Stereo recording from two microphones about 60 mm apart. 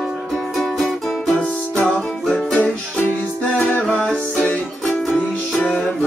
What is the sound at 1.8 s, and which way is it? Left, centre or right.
Music, left.